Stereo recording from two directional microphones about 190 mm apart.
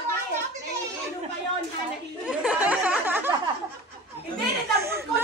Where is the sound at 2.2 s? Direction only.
5° right (ahead or behind).